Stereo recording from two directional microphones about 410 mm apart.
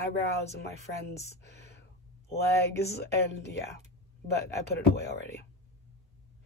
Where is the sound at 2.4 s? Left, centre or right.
Left.